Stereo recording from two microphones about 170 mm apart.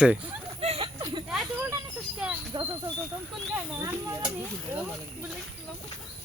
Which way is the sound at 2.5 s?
25° right (ahead or behind).